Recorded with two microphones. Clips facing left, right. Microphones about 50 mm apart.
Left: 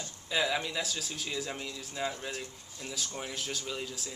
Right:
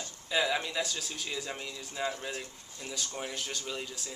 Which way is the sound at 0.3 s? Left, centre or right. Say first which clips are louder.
Right 1 dB; centre.